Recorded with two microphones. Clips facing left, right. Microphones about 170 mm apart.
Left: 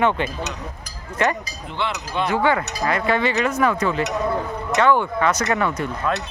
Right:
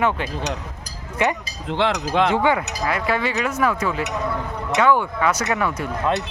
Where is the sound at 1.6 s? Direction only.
90° right.